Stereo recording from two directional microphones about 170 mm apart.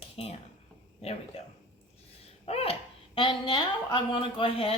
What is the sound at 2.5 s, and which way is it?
A woman's voice, 35° left (ahead or behind).